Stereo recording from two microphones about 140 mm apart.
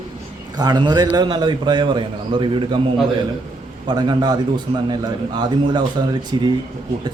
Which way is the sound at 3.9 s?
30° right (ahead or behind).